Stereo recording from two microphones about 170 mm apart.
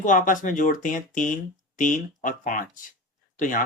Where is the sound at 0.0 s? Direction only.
50° left (ahead or behind).